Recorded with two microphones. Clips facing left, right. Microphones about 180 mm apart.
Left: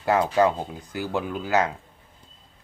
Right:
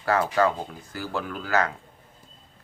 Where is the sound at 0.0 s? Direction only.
20° left (ahead or behind).